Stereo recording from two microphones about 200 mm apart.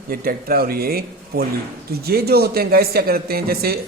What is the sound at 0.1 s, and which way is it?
A man's voice, 50° right (ahead or behind).